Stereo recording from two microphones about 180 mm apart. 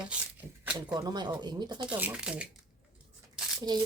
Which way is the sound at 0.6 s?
5° right (ahead or behind).